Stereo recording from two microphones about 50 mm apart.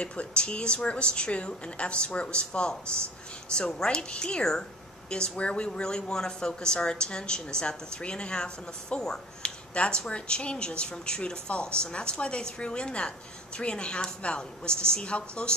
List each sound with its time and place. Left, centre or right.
0.0 s speech: left